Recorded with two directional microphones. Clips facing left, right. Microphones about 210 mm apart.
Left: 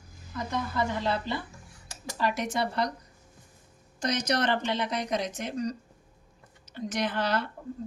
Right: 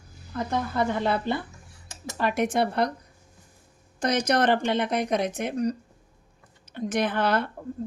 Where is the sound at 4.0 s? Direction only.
55° right (ahead or behind).